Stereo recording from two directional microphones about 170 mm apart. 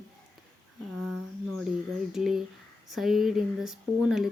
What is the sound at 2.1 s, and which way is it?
Speech, centre (ahead or behind).